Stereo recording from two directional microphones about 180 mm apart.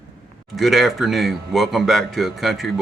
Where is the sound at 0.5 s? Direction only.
Centre (ahead or behind).